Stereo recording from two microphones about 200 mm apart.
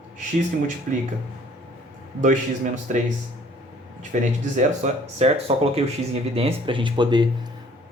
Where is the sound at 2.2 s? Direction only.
40° right (ahead or behind).